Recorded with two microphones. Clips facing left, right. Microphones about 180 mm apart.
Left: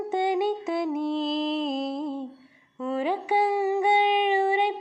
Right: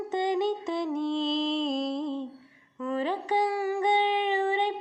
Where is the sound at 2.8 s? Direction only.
15° left (ahead or behind).